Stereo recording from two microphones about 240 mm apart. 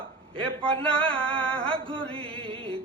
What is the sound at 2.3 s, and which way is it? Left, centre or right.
Music, right.